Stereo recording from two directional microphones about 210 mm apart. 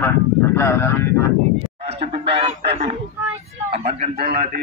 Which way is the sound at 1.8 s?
30° right (ahead or behind).